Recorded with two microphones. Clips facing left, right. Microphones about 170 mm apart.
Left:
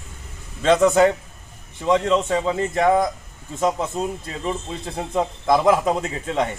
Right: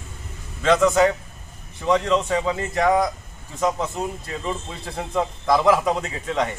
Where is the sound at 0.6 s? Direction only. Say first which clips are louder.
Left 2 dB; 25° left (ahead or behind).